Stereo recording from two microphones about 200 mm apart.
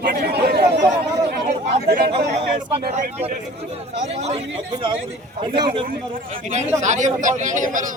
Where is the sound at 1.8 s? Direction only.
50° right (ahead or behind).